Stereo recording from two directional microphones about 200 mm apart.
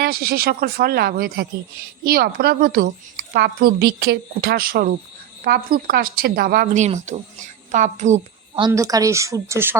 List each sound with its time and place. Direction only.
0.0 s a woman's voice: 50° right (ahead or behind)
8.6 s speech: 15° right (ahead or behind)